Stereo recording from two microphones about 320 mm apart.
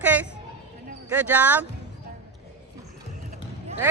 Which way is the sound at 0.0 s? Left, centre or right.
Centre.